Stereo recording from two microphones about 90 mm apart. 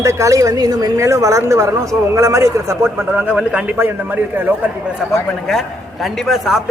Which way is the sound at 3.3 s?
10° right (ahead or behind).